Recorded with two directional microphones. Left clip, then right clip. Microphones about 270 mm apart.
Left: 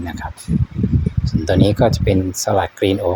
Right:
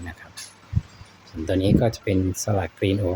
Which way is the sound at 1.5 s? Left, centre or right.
Centre.